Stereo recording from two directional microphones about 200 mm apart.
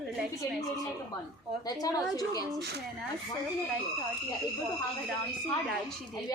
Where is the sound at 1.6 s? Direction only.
20° left (ahead or behind).